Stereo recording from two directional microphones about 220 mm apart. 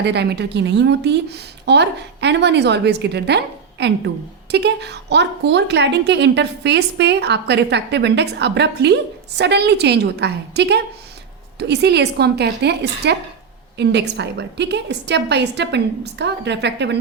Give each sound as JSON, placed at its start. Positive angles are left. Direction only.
{"t": 0.0, "sound": "a woman's voice", "side_deg": -50}